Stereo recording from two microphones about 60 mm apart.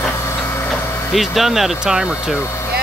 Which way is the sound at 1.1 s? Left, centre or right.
Centre.